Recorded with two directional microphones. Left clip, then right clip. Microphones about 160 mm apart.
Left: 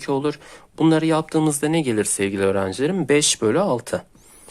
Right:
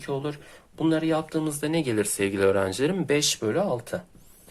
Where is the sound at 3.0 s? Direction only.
40° left (ahead or behind).